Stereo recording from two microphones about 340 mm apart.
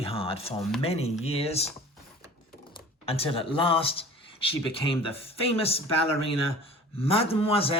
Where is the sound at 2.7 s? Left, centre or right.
Centre.